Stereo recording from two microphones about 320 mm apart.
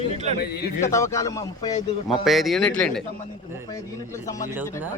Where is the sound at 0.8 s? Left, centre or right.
Centre.